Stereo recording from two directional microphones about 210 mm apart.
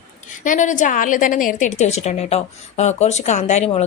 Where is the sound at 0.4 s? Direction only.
35° left (ahead or behind).